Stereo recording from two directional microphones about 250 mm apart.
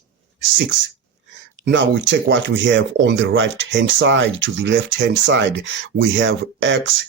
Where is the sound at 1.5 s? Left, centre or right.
Right.